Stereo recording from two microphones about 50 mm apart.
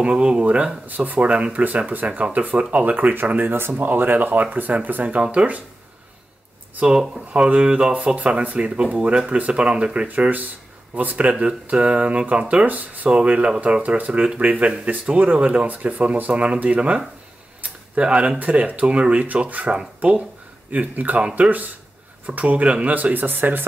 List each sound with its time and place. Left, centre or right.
0.0 s speech: right
6.9 s speech: centre
10.0 s speech: right
17.6 s a sound: right
18.4 s speech: right
23.1 s speech: right